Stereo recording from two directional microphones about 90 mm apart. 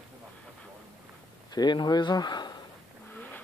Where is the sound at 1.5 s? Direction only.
55° left (ahead or behind).